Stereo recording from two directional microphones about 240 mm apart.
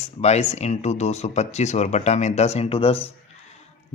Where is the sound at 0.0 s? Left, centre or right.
Left.